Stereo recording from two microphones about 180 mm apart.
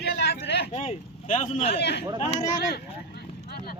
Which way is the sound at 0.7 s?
40° left (ahead or behind).